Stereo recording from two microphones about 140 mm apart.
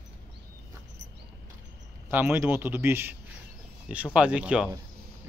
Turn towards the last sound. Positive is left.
turn(degrees=-5)  # may be behind; listen again after turning